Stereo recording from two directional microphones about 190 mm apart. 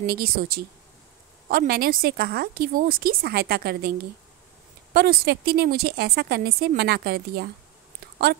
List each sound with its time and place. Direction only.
0.0 s a woman's voice: 50° right (ahead or behind)